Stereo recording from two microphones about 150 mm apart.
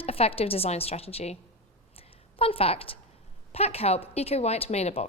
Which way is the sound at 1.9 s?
40° left (ahead or behind).